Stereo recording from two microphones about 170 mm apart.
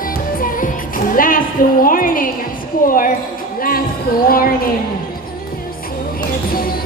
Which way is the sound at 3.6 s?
60° left (ahead or behind).